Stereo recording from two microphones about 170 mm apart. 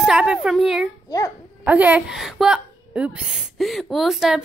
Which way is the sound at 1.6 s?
10° right (ahead or behind).